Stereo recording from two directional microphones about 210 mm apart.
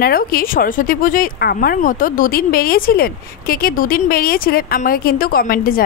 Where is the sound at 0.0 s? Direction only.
45° left (ahead or behind).